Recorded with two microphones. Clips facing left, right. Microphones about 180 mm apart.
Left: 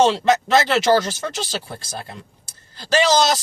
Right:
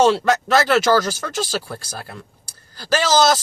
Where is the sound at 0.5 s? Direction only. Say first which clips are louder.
Right 2 dB; 20° left (ahead or behind).